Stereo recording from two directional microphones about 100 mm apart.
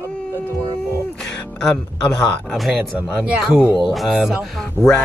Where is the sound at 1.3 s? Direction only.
5° left (ahead or behind).